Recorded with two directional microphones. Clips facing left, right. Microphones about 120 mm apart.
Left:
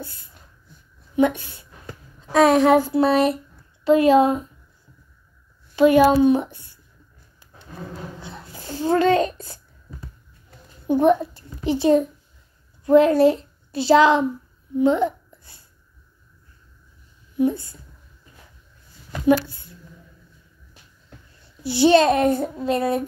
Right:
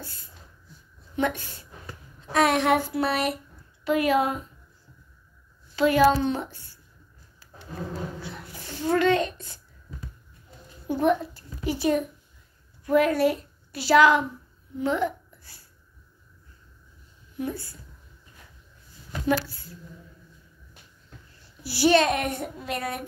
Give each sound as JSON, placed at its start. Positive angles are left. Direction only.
{"t": 0.0, "sound": "a sound", "side_deg": 15}
{"t": 1.1, "sound": "a woman's voice", "side_deg": 15}
{"t": 2.4, "sound": "a child's voice", "side_deg": 35}
{"t": 5.8, "sound": "a woman's voice", "side_deg": 20}
{"t": 8.2, "sound": "a sound", "side_deg": 25}
{"t": 10.9, "sound": "a child's voice", "side_deg": 20}
{"t": 14.8, "sound": "a sound", "side_deg": 20}
{"t": 17.4, "sound": "a child's voice", "side_deg": 20}
{"t": 19.2, "sound": "a child's voice", "side_deg": 20}
{"t": 21.6, "sound": "a child's voice", "side_deg": 25}